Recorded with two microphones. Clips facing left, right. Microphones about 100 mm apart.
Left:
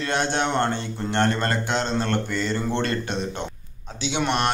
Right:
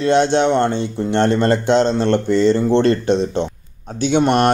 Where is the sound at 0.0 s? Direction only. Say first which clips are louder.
Right 10 dB; 25° right (ahead or behind).